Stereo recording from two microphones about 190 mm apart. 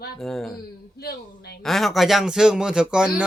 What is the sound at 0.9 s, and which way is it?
Speech, 55° left (ahead or behind).